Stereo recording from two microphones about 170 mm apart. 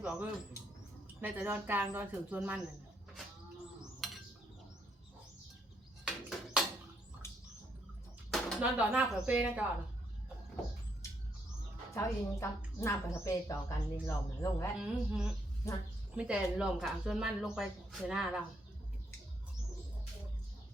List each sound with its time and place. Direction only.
0.0 s speech: 10° right (ahead or behind)
4.0 s a sound: centre (ahead or behind)
6.1 s a sound: 5° right (ahead or behind)
8.3 s speech: 5° right (ahead or behind)
11.9 s a woman's voice: 15° left (ahead or behind)
14.8 s speech: 5° right (ahead or behind)